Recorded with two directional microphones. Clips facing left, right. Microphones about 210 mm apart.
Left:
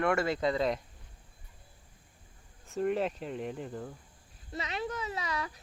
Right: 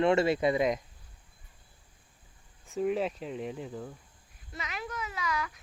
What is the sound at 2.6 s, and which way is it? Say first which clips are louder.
Speech: right 1 dB; centre (ahead or behind).